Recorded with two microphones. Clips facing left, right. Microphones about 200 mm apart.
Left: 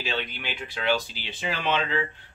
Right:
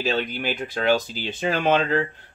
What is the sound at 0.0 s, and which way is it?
Speech, 40° right (ahead or behind).